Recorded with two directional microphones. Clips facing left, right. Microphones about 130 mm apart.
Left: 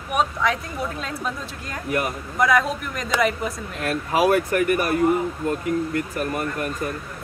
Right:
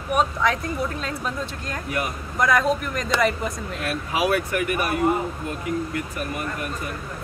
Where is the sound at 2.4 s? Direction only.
5° left (ahead or behind).